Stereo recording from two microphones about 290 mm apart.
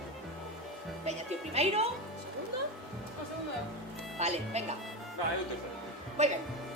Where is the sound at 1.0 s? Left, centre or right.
Right.